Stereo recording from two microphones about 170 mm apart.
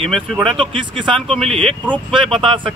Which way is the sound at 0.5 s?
30° right (ahead or behind).